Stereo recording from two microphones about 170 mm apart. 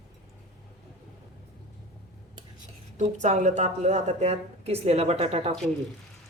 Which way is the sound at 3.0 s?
45° right (ahead or behind).